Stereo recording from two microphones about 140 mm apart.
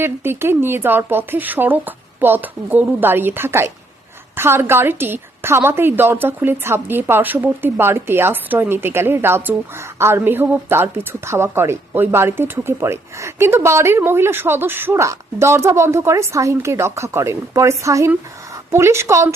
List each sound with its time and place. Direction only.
0.0 s a woman's voice: 15° right (ahead or behind)